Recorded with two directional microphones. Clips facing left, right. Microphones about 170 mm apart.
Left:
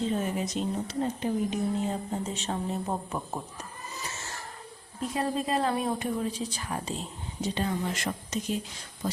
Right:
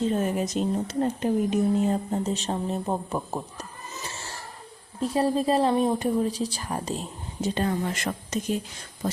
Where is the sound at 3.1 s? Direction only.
30° right (ahead or behind).